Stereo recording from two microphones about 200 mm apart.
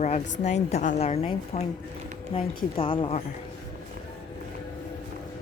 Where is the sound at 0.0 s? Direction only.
35° left (ahead or behind).